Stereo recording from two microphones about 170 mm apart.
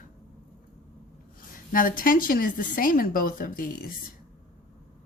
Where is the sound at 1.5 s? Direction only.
55° left (ahead or behind).